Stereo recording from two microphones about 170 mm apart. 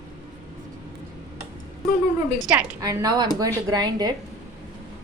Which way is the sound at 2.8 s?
25° right (ahead or behind).